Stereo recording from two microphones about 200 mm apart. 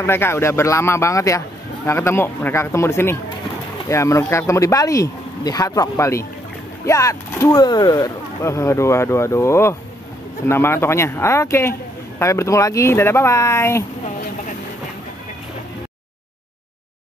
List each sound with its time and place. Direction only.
0.0 s speech: 10° left (ahead or behind)